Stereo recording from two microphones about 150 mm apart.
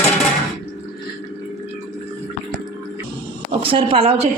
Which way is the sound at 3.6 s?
40° right (ahead or behind).